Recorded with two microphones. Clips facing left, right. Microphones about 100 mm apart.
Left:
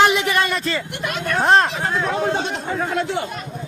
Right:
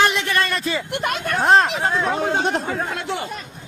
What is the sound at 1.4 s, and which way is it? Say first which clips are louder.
Speech: even; centre (ahead or behind).